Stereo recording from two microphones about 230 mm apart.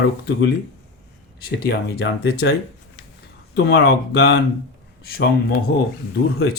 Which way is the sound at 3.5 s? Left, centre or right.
Left.